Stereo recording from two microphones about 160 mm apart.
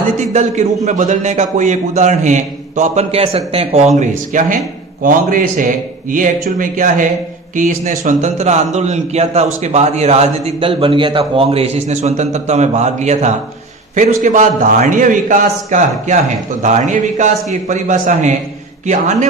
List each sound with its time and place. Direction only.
0.2 s a man's voice: 45° right (ahead or behind)